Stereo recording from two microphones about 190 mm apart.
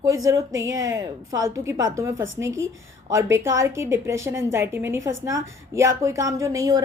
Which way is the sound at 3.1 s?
15° right (ahead or behind).